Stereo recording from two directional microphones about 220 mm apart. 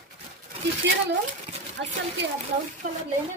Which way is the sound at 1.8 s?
50° right (ahead or behind).